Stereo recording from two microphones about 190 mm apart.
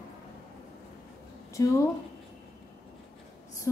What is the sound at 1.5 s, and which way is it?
Speech, 15° left (ahead or behind).